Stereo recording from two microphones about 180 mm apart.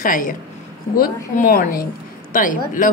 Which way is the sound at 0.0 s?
50° left (ahead or behind).